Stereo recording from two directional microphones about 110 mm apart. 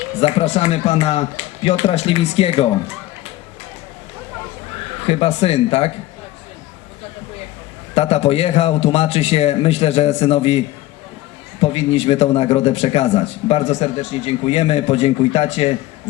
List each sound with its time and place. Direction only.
0.2 s a man's voice: 70° left (ahead or behind)
4.8 s speech: 70° left (ahead or behind)
7.9 s a man's voice: 70° left (ahead or behind)
11.6 s a man's voice: 70° left (ahead or behind)